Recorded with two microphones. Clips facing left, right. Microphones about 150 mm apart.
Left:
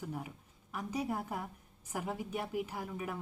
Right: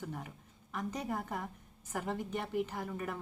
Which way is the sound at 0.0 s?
10° left (ahead or behind).